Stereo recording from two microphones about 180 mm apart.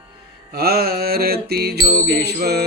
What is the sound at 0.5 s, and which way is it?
Music, 60° right (ahead or behind).